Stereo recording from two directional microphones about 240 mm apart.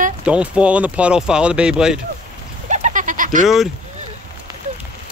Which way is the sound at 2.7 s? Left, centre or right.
Right.